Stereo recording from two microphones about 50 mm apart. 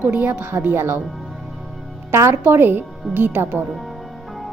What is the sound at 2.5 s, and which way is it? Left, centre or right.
Speech, right.